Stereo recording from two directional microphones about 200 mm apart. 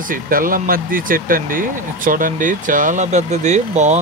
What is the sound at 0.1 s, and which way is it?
Speech, 45° right (ahead or behind).